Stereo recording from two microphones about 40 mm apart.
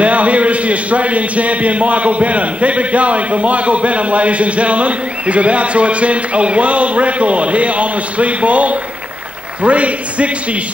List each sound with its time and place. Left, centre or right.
0.0 s a man's voice: right